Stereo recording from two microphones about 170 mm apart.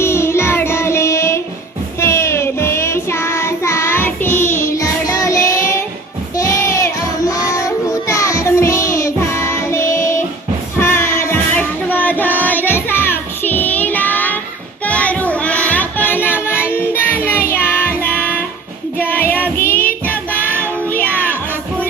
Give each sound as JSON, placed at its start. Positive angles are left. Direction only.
{"t": 0.0, "sound": "child singing", "side_deg": 15}
{"t": 10.8, "sound": "music", "side_deg": 15}
{"t": 14.8, "sound": "child singing", "side_deg": 10}